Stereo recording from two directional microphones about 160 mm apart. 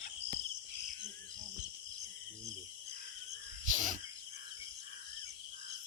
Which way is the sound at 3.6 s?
55° right (ahead or behind).